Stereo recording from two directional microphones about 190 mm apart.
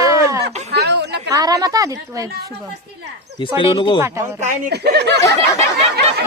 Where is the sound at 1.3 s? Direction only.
20° right (ahead or behind).